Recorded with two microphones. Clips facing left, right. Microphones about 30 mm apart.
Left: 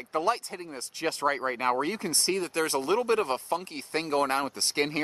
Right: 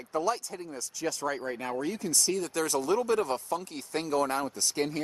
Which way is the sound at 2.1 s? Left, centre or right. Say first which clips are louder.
Left 1 dB; left.